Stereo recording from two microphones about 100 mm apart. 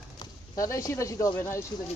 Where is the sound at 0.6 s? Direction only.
35° left (ahead or behind).